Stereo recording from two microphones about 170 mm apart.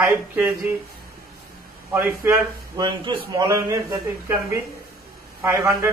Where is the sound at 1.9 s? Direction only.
15° right (ahead or behind).